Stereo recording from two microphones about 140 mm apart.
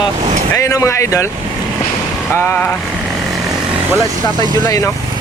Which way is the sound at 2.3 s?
15° left (ahead or behind).